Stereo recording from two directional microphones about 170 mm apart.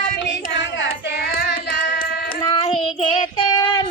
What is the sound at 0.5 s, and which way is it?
Child singing, 90° left.